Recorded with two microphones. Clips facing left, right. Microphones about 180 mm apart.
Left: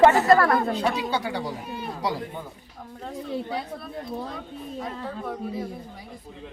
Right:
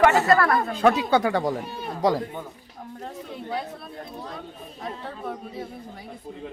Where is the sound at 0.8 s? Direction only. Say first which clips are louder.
Right 6 dB; 50° right (ahead or behind).